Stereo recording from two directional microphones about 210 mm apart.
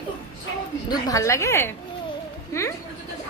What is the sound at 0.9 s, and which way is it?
A woman's voice, 15° left (ahead or behind).